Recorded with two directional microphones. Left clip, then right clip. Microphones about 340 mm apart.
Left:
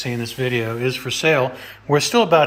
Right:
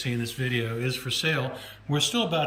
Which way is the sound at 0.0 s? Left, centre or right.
Centre.